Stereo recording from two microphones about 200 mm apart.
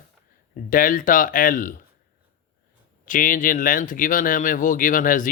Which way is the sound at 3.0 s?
40° left (ahead or behind).